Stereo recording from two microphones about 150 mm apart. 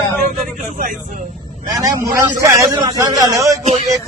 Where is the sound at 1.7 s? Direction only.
20° right (ahead or behind).